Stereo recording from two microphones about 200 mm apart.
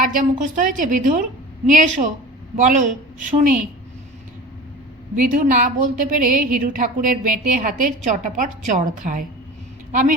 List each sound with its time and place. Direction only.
0.0 s a woman's voice: 40° right (ahead or behind)
5.2 s a woman's voice: 40° right (ahead or behind)